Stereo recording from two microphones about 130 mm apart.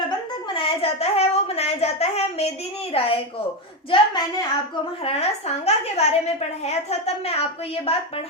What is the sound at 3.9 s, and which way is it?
Speech, 35° left (ahead or behind).